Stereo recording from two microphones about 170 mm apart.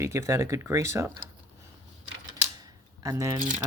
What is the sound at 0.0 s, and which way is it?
Speech, 15° right (ahead or behind).